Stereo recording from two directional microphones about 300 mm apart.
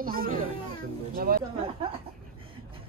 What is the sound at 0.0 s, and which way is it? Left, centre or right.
Speech, right.